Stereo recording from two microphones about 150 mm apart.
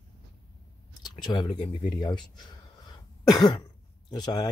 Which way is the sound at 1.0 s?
30° left (ahead or behind).